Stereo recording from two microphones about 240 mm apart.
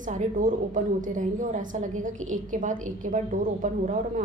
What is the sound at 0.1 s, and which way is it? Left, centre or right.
A woman's voice, right.